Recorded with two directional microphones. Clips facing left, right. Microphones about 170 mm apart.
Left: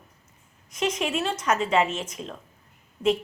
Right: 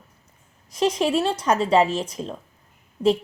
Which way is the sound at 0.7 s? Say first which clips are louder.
Right 6 dB; 35° right (ahead or behind).